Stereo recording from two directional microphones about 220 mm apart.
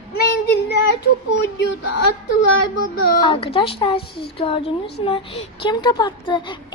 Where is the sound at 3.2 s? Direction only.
25° left (ahead or behind).